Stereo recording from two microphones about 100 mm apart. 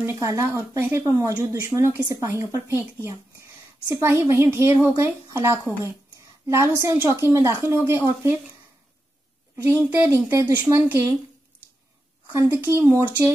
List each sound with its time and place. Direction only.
0.0 s speech: 30° right (ahead or behind)
1.0 s a woman's voice: 35° right (ahead or behind)
9.6 s speech: 25° right (ahead or behind)
12.3 s speech: 20° right (ahead or behind)